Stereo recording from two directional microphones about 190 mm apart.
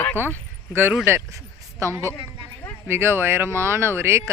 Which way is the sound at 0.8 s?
10° right (ahead or behind).